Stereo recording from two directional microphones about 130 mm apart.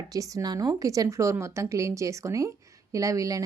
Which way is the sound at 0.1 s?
25° right (ahead or behind).